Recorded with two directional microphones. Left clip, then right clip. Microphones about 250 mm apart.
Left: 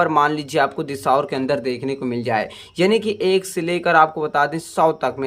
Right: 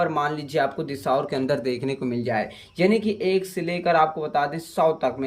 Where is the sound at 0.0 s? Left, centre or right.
Centre.